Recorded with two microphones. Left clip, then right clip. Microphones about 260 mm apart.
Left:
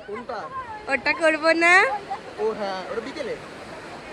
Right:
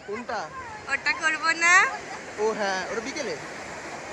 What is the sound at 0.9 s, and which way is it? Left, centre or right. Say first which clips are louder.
A man's voice: left 4 dB; centre.